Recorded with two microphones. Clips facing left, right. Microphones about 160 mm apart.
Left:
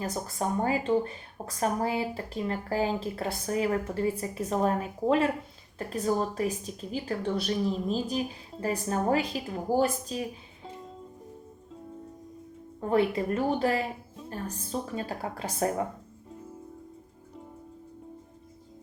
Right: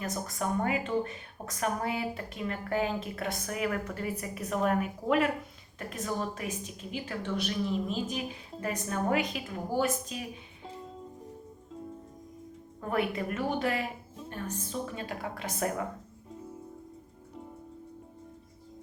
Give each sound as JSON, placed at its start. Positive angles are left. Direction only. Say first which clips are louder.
{"t": 0.0, "sound": "speech", "louder": "left 2 dB", "side_deg": 30}
{"t": 12.9, "sound": "speech", "louder": "left 5 dB", "side_deg": 30}